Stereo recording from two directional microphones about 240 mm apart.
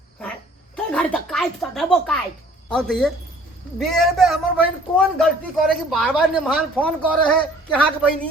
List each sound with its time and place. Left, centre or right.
0.9 s a man's voice: centre